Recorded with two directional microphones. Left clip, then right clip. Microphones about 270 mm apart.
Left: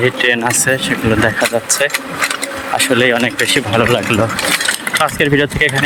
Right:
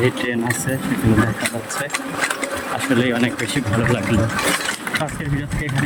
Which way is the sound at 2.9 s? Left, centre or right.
Centre.